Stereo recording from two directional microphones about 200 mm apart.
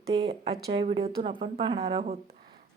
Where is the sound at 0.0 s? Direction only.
20° right (ahead or behind).